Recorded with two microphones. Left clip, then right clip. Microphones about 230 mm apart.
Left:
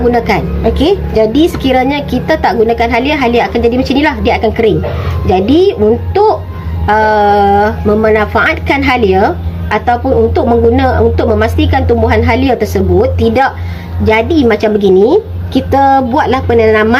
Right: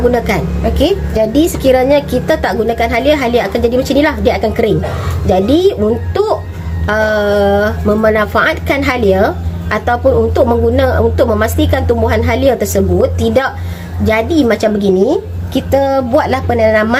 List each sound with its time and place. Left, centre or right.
0.1 s speech: right
6.8 s speech: right
16.1 s speech: right